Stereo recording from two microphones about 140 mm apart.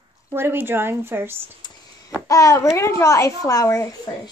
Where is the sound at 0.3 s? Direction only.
15° right (ahead or behind).